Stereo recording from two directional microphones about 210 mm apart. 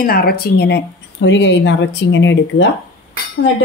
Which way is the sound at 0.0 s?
45° left (ahead or behind).